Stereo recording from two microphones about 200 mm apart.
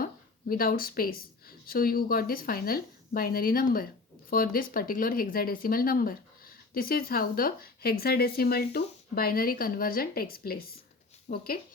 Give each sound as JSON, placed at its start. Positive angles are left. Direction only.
{"t": 0.0, "sound": "speech", "side_deg": 45}